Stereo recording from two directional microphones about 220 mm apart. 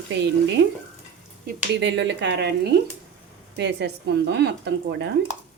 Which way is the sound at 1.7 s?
55° right (ahead or behind).